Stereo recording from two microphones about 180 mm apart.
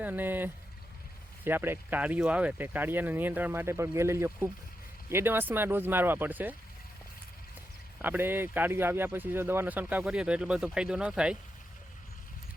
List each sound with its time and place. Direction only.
0.0 s speech: 10° right (ahead or behind)
7.9 s speech: 10° right (ahead or behind)